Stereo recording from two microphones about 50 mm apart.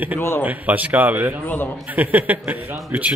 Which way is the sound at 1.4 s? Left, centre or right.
Left.